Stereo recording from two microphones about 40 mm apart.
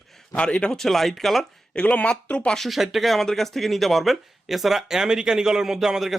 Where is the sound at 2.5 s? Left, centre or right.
Centre.